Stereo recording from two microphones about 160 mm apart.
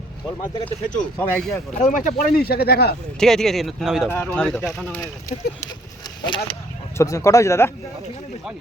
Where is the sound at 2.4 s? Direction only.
75° left (ahead or behind).